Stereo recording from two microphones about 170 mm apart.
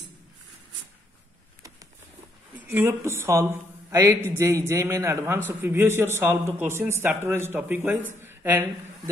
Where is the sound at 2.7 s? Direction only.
15° right (ahead or behind).